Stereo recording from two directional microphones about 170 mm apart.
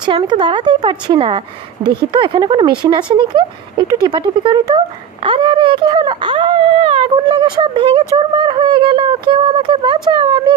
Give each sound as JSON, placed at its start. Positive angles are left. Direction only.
{"t": 0.0, "sound": "speech", "side_deg": -25}